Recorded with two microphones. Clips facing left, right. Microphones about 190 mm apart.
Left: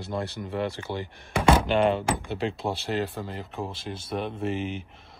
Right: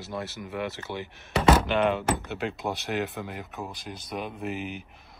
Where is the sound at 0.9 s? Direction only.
15° left (ahead or behind).